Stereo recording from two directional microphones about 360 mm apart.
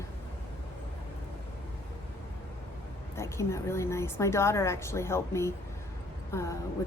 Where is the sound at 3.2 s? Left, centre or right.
Centre.